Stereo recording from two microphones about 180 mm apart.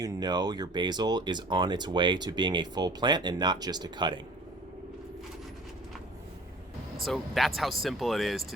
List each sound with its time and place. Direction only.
0.0 s speech: 20° right (ahead or behind)
7.0 s speech: centre (ahead or behind)